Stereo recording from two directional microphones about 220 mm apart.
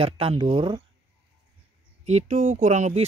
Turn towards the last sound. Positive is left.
turn(degrees=-30)  # may be behind; listen again after turning